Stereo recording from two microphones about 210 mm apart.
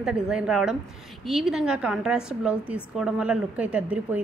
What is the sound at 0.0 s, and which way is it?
A woman's voice, 5° right (ahead or behind).